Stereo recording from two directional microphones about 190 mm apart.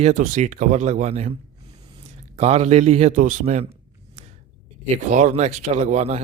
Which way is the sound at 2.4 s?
35° right (ahead or behind).